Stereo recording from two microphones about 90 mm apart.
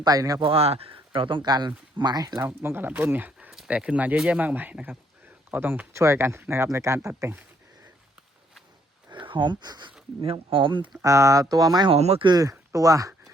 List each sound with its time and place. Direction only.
0.0 s speech: 45° right (ahead or behind)
0.3 s speech: 80° right; by 2.4 s 45° right (ahead or behind)
2.6 s speech: 25° right (ahead or behind)
3.3 s a sound: 5° right (ahead or behind)
3.7 s speech: 15° right (ahead or behind)
5.9 s speech: 30° right (ahead or behind)
9.0 s speech: 65° right (ahead or behind)
10.2 s speech: 70° right (ahead or behind)
11.0 s speech: 35° right (ahead or behind)
11.9 s speech: 85° right
12.3 s speech: 40° right (ahead or behind)